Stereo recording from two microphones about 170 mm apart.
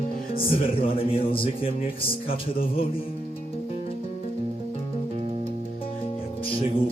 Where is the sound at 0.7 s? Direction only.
30° left (ahead or behind).